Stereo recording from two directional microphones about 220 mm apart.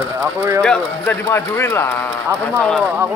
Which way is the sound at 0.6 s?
10° left (ahead or behind).